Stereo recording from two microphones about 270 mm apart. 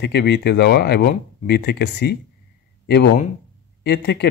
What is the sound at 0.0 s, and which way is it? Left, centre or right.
Speech, left.